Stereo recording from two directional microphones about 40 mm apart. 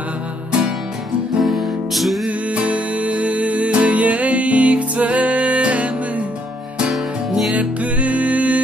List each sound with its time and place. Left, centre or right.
1.4 s music: centre
2.2 s music: right
6.9 s music: centre
7.5 s music: right